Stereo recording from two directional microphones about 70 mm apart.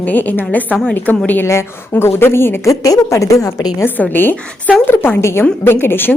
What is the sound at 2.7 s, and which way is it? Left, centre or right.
A woman's voice, left.